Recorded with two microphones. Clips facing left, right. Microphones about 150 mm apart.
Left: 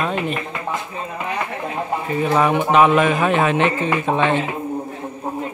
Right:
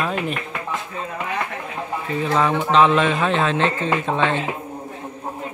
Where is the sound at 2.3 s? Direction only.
15° left (ahead or behind).